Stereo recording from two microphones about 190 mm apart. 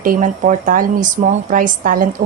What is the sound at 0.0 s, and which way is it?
A woman's voice, 45° right (ahead or behind).